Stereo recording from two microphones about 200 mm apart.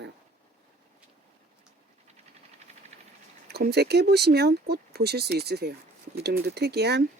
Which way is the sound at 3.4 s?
55° right (ahead or behind).